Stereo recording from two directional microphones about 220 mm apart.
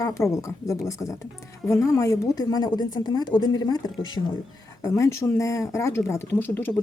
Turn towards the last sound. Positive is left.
turn(degrees=10)  # may be behind; listen again after turning